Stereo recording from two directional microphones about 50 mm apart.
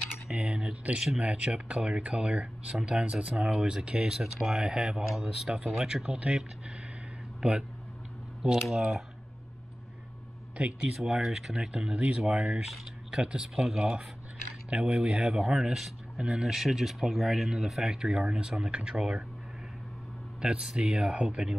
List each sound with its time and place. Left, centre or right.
0.3 s speech: centre
7.4 s speech: centre
8.4 s speech: centre
11.0 s speech: centre
16.4 s speech: centre
20.3 s speech: centre